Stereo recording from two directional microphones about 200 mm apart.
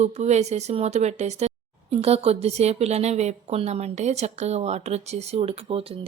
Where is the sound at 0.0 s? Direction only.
35° right (ahead or behind).